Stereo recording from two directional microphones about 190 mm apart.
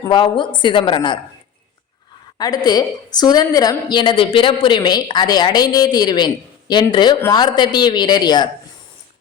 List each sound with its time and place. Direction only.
0.1 s a woman's voice: 25° left (ahead or behind)
2.4 s a woman's voice: 20° left (ahead or behind)